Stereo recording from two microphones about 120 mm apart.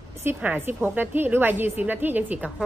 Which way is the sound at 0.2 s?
15° right (ahead or behind).